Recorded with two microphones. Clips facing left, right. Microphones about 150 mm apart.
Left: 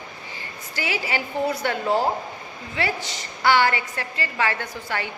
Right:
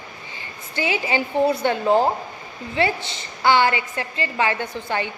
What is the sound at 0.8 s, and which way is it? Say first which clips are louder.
A woman's voice: right 4 dB; 20° right (ahead or behind).